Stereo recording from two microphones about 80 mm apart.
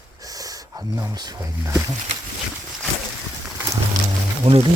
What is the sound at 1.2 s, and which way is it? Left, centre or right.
Speech, right.